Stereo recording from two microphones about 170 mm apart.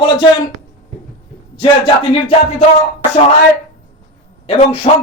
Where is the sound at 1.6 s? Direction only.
30° left (ahead or behind).